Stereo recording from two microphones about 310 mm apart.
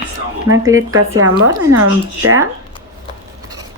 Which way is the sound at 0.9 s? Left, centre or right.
Right.